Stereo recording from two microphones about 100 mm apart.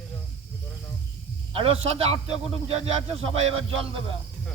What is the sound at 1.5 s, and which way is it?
Speech, 70° right (ahead or behind).